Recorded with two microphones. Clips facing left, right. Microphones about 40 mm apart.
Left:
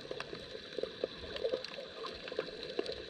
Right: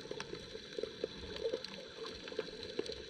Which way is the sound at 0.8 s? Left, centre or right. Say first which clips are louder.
Left 3 dB; left.